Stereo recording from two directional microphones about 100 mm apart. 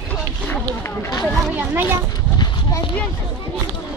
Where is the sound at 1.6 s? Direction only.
20° right (ahead or behind).